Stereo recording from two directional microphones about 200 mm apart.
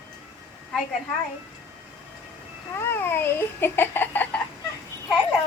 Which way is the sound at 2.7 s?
10° left (ahead or behind).